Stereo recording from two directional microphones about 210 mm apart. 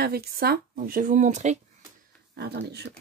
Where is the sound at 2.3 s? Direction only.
50° right (ahead or behind).